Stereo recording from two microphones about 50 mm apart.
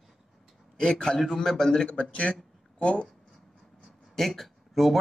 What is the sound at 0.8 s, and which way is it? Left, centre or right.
A man's voice, centre.